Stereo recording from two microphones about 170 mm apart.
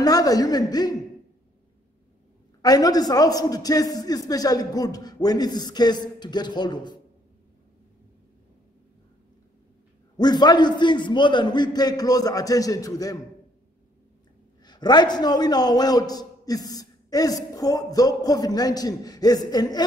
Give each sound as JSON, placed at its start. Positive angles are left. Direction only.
{"t": 0.0, "sound": "a man's voice", "side_deg": 20}
{"t": 2.6, "sound": "a man's voice", "side_deg": 20}
{"t": 10.1, "sound": "a man's voice", "side_deg": 25}
{"t": 14.6, "sound": "a man's voice", "side_deg": 25}